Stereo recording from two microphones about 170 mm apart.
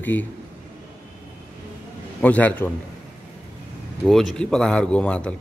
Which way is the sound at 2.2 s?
10° left (ahead or behind).